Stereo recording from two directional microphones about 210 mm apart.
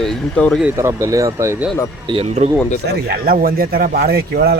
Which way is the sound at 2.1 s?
30° right (ahead or behind).